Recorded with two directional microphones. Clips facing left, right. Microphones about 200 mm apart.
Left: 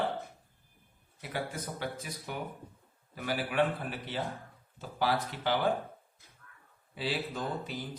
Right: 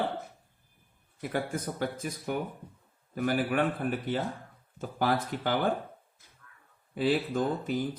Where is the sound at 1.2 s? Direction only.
50° right (ahead or behind).